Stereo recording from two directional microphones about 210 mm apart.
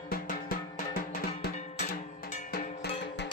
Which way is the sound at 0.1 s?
45° left (ahead or behind).